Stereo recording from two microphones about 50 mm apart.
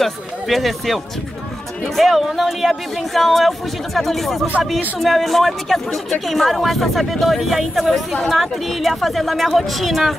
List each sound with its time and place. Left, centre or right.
0.0 s a woman's voice: centre